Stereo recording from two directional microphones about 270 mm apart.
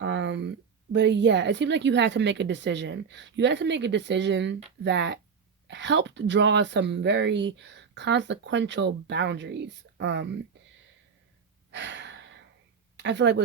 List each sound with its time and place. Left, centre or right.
0.0 s a sound: right
0.9 s speech: right
11.7 s gasp: right
13.0 s speech: right